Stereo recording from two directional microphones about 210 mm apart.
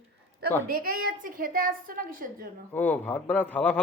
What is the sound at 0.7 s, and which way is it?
A woman's voice, 45° right (ahead or behind).